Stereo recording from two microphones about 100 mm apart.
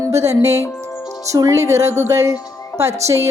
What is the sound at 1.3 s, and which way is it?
Music, 30° right (ahead or behind).